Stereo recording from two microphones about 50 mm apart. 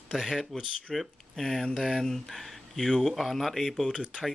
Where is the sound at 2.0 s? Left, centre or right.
Centre.